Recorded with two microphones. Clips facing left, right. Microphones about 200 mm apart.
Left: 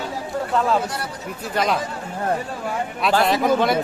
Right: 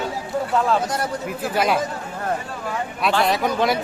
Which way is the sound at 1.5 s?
5° right (ahead or behind).